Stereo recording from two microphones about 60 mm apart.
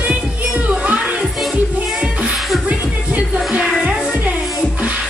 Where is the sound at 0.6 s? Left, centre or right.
Right.